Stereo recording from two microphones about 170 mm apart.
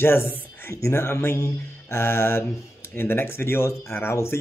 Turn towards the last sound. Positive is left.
turn(degrees=15)  # may be behind; listen again after turning